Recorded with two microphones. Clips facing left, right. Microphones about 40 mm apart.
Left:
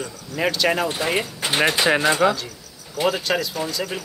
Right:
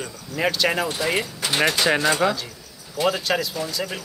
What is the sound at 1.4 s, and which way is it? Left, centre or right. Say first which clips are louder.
Speech: left 2 dB; left.